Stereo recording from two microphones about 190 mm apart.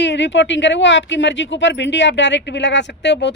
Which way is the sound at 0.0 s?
65° left (ahead or behind).